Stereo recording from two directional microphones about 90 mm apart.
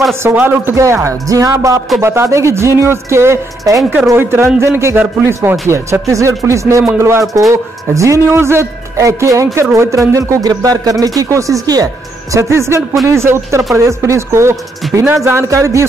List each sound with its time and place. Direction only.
0.1 s speech: 25° right (ahead or behind)